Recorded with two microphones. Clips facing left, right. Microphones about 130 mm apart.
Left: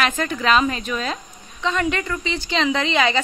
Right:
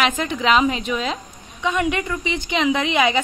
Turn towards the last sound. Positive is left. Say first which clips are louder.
# right 1 dB
turn(degrees=-15)  # may be behind; listen again after turning